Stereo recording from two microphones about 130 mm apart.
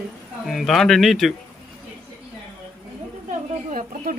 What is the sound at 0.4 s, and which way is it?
Speech, centre (ahead or behind).